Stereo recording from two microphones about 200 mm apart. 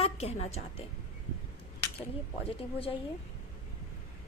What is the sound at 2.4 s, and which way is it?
Speech, 30° left (ahead or behind).